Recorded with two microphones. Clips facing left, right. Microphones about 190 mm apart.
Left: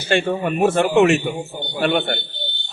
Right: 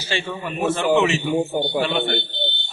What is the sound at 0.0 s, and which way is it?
A man's voice, 55° left (ahead or behind).